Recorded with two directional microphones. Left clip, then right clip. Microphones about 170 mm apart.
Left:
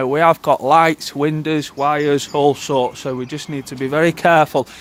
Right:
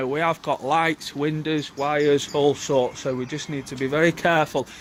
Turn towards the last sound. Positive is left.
turn(degrees=40)  # may be behind; listen again after turning